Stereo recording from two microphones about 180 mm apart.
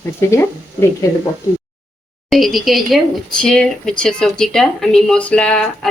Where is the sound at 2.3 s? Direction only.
Centre (ahead or behind).